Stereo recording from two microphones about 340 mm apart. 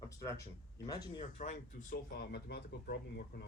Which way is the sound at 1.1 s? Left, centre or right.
Centre.